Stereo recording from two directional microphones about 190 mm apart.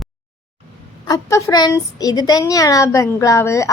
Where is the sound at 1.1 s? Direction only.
15° left (ahead or behind).